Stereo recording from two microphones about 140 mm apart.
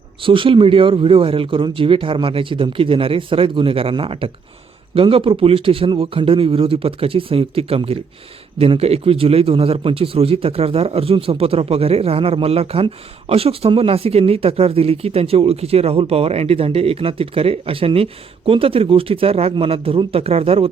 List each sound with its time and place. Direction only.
0.2 s a man's voice: 40° right (ahead or behind)